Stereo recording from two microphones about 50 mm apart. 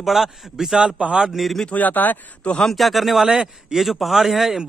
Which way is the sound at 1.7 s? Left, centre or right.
Left.